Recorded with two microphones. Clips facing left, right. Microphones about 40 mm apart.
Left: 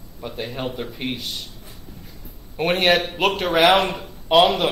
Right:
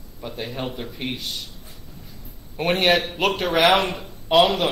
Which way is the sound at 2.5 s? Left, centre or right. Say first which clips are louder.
Left 1 dB; centre.